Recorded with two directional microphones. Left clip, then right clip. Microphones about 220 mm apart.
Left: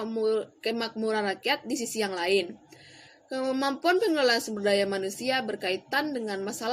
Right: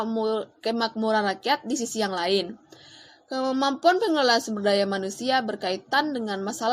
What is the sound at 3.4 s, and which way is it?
A woman's voice, 15° right (ahead or behind).